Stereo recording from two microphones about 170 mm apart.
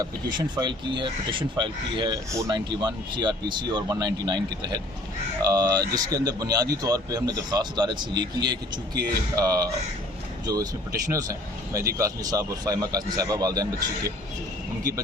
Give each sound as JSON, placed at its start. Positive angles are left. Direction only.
{"t": 0.0, "sound": "speech", "side_deg": -25}